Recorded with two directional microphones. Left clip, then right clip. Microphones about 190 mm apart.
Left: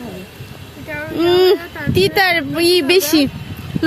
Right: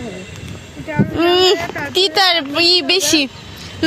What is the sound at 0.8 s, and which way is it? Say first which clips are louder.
A child's voice: right 1 dB; 20° left (ahead or behind).